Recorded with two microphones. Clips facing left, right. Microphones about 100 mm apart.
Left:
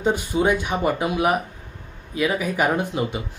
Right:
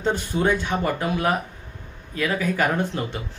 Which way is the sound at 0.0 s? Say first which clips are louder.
Left 2 dB; 10° left (ahead or behind).